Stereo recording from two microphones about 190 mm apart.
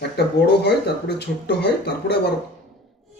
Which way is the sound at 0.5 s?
60° left (ahead or behind).